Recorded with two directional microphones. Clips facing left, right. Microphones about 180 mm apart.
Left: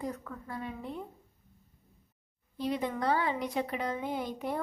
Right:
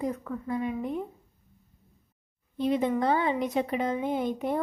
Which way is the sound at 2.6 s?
20° right (ahead or behind).